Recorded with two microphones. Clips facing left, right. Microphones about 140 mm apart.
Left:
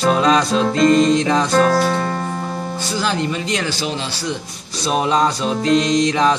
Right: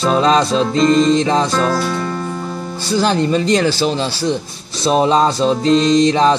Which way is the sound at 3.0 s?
35° right (ahead or behind).